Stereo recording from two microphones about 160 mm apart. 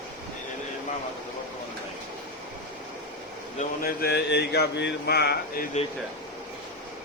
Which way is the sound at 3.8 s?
85° left.